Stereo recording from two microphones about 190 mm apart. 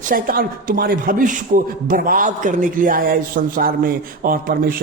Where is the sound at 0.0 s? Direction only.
50° right (ahead or behind).